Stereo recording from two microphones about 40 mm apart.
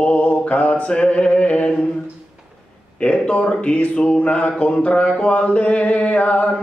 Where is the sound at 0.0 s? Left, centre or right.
Left.